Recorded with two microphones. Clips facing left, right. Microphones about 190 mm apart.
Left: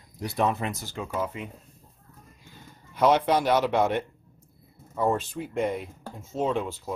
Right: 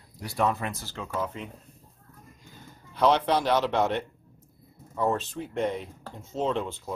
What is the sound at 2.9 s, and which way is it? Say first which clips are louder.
Speech: left 1 dB; 10° left (ahead or behind).